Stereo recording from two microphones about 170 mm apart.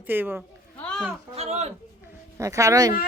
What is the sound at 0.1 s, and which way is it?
Speech, 10° right (ahead or behind).